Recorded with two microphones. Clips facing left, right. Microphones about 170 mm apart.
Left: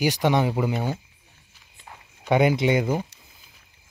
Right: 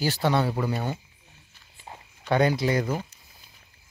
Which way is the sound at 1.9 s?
25° right (ahead or behind).